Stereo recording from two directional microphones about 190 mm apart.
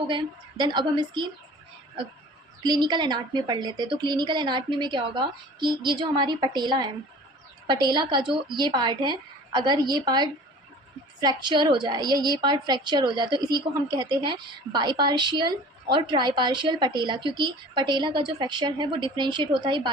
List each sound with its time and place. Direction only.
0.1 s a woman's voice: 25° right (ahead or behind)
2.6 s a woman's voice: 20° right (ahead or behind)